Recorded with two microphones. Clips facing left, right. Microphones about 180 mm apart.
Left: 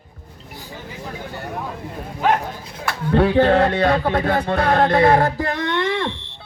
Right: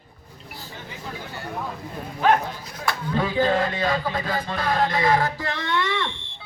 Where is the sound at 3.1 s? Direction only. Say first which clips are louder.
Left 8 dB; 65° left (ahead or behind); by 6.1 s 50° left (ahead or behind).